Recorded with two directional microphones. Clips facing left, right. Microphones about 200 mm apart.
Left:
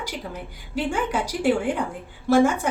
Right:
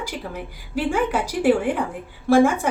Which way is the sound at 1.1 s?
5° right (ahead or behind).